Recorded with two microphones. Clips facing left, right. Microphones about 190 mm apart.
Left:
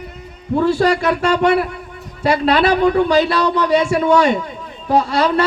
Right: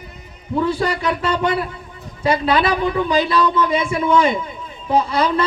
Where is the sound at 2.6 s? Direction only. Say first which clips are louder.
Left 5 dB; 45° left (ahead or behind).